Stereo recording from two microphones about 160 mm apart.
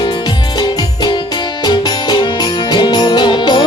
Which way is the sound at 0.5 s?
25° left (ahead or behind).